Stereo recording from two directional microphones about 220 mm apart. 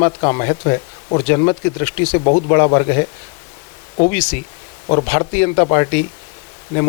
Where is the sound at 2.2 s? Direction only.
35° left (ahead or behind).